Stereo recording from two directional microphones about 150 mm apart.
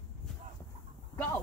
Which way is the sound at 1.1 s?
10° left (ahead or behind).